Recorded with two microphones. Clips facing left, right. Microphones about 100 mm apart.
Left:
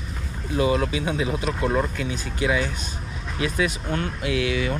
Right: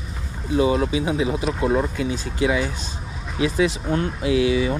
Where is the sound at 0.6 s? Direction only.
30° right (ahead or behind).